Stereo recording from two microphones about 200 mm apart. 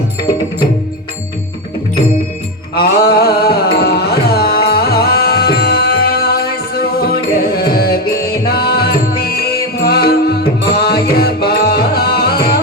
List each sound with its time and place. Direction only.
2.8 s music: 50° left (ahead or behind)